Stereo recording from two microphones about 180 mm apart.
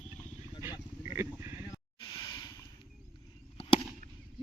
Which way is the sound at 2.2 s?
20° left (ahead or behind).